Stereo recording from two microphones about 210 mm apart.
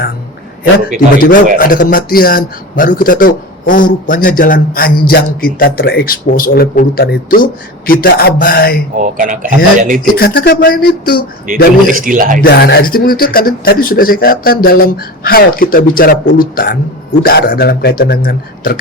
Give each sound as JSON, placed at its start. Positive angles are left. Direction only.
{"t": 0.9, "sound": "speech", "side_deg": 40}
{"t": 9.0, "sound": "a man's voice", "side_deg": -40}
{"t": 10.2, "sound": "speech", "side_deg": 50}
{"t": 11.4, "sound": "a man's voice", "side_deg": -40}
{"t": 12.4, "sound": "speech", "side_deg": 50}